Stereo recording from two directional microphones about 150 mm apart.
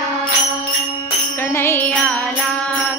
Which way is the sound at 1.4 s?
15° left (ahead or behind).